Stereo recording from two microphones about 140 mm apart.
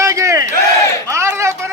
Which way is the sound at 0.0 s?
20° right (ahead or behind).